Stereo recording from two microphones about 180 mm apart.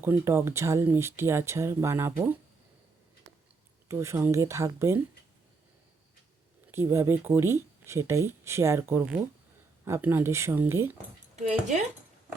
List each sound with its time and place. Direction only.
0.0 s speech: 15° right (ahead or behind)
3.8 s speech: 15° right (ahead or behind)
6.7 s speech: 15° right (ahead or behind)